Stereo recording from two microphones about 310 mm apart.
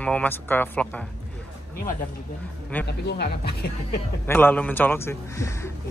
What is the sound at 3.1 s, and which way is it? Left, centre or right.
Speech, left.